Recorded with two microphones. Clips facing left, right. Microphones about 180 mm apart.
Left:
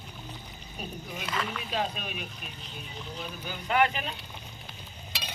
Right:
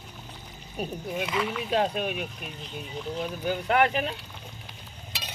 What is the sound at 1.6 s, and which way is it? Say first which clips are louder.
Speech: right 7 dB; 60° right (ahead or behind).